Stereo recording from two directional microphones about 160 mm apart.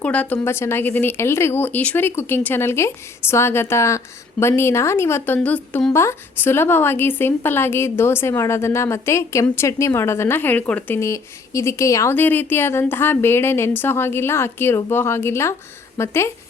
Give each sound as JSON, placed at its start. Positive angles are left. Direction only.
{"t": 0.0, "sound": "speech", "side_deg": 10}